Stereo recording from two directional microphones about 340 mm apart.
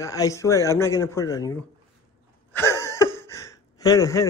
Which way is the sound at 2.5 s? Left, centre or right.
Centre.